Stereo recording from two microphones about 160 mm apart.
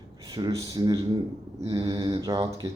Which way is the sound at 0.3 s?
25° right (ahead or behind).